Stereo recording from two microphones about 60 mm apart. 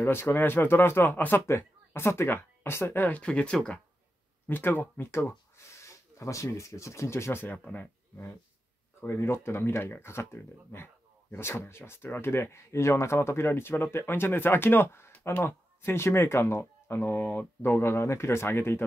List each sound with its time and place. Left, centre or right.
0.0 s speech: left
1.6 s speech: left
3.1 s speech: centre
4.5 s speech: left
6.1 s speech: left
9.0 s speech: left
17.9 s speech: left